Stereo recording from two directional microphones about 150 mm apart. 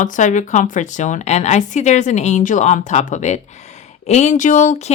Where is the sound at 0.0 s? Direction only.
55° left (ahead or behind).